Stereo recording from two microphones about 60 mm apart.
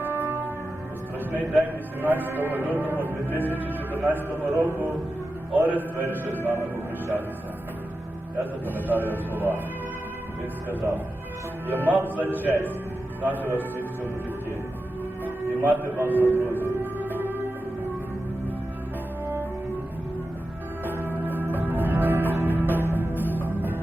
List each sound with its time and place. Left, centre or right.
0.0 s music: right
2.0 s speech: right
8.6 s speech: right
11.7 s a man's voice: right
15.2 s music: right
20.8 s music: right